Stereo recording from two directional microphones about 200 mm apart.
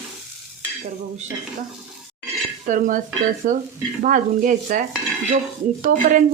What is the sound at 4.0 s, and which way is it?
Speech, 40° right (ahead or behind).